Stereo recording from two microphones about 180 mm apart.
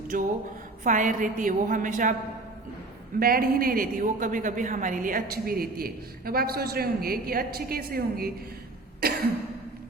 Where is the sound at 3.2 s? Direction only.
55° right (ahead or behind).